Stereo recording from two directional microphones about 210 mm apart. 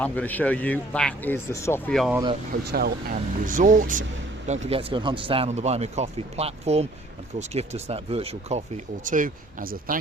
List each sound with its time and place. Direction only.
0.0 s speech: 5° left (ahead or behind)
2.0 s speech: 5° right (ahead or behind)
2.5 s speech: 50° right (ahead or behind)